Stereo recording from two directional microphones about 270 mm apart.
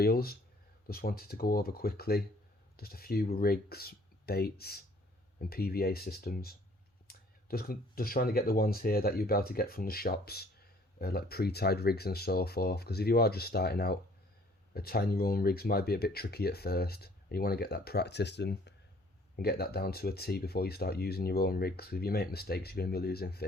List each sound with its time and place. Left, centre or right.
0.0 s speech: left